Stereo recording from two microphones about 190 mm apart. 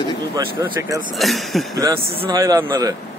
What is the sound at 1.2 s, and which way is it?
Speech, centre (ahead or behind).